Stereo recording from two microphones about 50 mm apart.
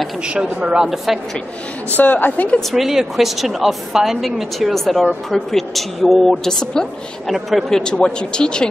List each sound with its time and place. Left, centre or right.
0.3 s speech: right
0.8 s a woman's voice: centre
1.9 s a woman's voice: left
2.7 s a woman's voice: centre
7.2 s a woman's voice: centre
7.7 s speech: centre